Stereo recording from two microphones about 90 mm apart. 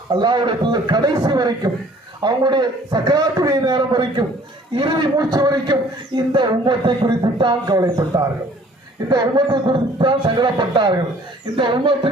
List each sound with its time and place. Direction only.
0.1 s a man's voice: 55° right (ahead or behind)